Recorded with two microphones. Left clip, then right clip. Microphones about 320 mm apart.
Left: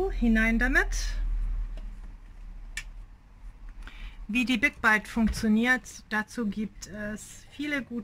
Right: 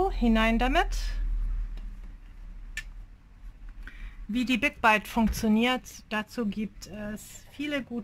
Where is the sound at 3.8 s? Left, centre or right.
Centre.